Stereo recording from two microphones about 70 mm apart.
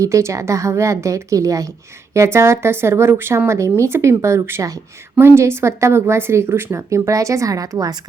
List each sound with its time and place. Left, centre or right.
0.0 s a woman's voice: right
2.1 s speech: right